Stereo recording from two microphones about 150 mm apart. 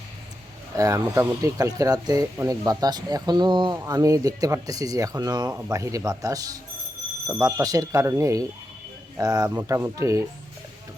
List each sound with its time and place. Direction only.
0.8 s speech: 20° right (ahead or behind)